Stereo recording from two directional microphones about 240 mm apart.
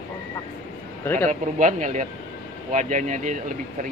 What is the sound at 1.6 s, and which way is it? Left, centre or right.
Speech, right.